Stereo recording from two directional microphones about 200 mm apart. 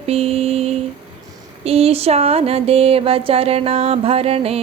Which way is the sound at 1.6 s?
30° right (ahead or behind).